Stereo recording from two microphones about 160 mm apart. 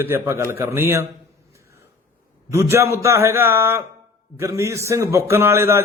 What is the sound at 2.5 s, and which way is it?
Mantra, 15° right (ahead or behind).